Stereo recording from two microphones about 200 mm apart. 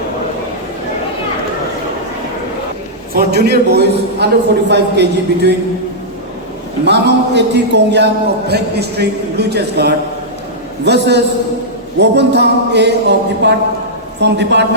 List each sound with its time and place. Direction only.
3.2 s a man's voice: 55° right (ahead or behind)
6.8 s a man's voice: 55° right (ahead or behind)